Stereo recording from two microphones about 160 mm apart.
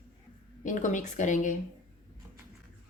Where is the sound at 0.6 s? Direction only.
50° left (ahead or behind).